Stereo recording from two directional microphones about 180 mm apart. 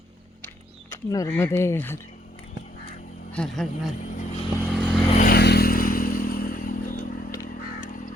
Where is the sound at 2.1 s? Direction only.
45° left (ahead or behind).